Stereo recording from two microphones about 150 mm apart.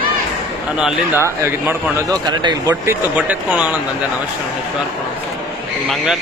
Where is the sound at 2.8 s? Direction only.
10° right (ahead or behind).